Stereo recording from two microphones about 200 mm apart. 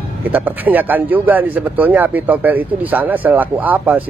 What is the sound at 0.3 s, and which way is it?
Speech, 10° right (ahead or behind).